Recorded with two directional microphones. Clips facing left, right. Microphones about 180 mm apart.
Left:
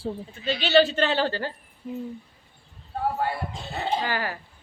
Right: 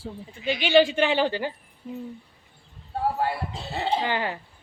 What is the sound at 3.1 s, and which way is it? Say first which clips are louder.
Speech: right 1 dB; 30° right (ahead or behind).